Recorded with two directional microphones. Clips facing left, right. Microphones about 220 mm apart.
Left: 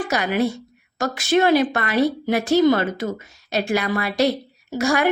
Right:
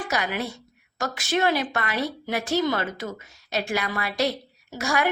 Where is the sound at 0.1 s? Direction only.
35° left (ahead or behind).